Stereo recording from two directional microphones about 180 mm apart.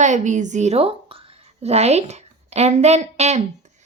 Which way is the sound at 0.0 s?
40° right (ahead or behind).